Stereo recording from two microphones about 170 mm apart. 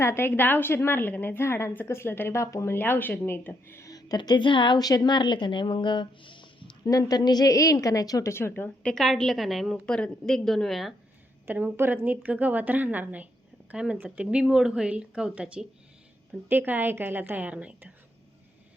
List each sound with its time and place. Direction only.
0.0 s a woman's voice: 15° left (ahead or behind)
11.4 s a woman's voice: 10° right (ahead or behind)